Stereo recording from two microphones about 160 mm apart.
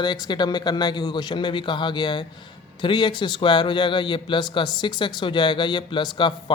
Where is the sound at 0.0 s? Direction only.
25° left (ahead or behind).